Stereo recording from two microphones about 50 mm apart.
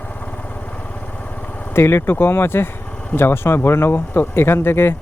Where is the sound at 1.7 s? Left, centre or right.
Left.